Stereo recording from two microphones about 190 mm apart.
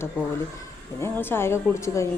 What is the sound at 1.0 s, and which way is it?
Speech, 10° left (ahead or behind).